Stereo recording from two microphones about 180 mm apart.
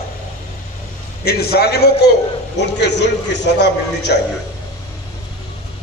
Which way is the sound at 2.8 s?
75° left (ahead or behind).